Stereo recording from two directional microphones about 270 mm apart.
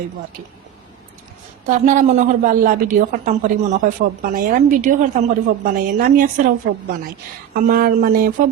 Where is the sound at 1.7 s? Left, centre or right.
Right.